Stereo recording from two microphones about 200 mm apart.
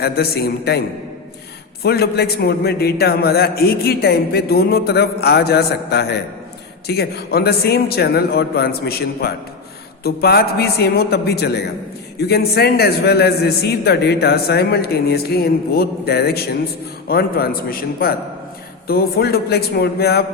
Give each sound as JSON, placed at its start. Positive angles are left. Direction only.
{"t": 0.0, "sound": "a man's voice", "side_deg": 50}
{"t": 1.8, "sound": "a man's voice", "side_deg": 55}